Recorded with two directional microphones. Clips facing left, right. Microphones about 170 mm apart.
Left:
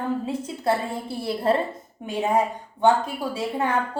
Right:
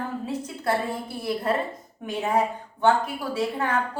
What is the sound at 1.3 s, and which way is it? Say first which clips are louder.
Speech: left 3 dB; 30° left (ahead or behind).